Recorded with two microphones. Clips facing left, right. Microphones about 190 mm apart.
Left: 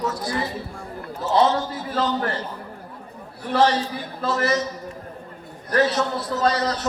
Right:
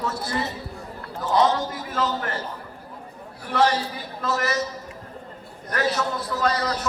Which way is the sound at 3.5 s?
30° left (ahead or behind).